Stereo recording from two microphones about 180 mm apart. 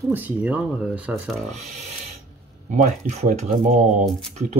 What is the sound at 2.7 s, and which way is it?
Speech, 45° right (ahead or behind).